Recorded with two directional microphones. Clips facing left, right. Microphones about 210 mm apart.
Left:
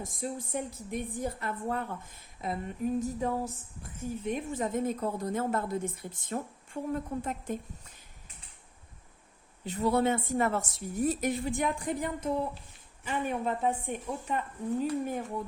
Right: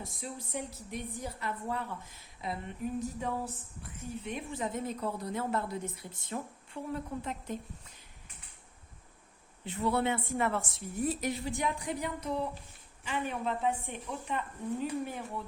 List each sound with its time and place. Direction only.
0.0 s a woman's voice: 50° left (ahead or behind)
3.0 s a sound: 40° left (ahead or behind)
4.2 s a woman's voice: 45° left (ahead or behind)
9.6 s a woman's voice: 40° left (ahead or behind)